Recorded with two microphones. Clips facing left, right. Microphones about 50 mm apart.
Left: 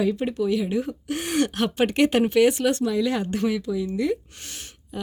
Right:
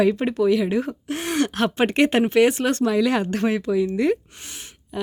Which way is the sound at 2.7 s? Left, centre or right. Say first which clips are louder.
Right 4 dB; right.